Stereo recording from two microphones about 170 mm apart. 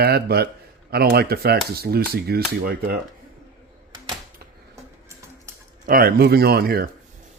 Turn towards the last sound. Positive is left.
turn(degrees=-65)  # may be behind; listen again after turning